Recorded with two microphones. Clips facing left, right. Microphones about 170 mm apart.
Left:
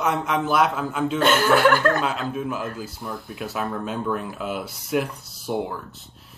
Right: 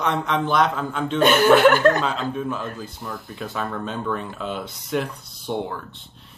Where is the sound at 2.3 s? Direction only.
5° left (ahead or behind).